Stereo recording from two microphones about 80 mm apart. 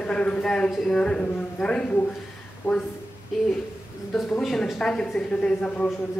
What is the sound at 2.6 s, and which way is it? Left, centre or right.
Speech, left.